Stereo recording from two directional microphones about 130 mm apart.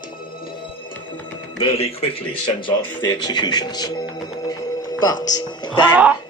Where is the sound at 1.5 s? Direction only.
50° left (ahead or behind).